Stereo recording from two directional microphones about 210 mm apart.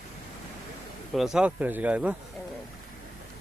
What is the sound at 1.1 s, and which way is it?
Speech, centre (ahead or behind).